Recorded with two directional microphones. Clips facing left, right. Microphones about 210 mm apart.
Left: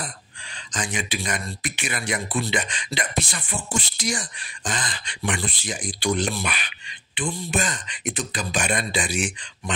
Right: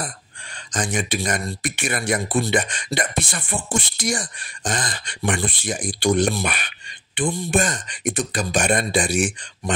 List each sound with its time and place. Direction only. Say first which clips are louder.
0.7 s speech: right 5 dB; 45° right (ahead or behind)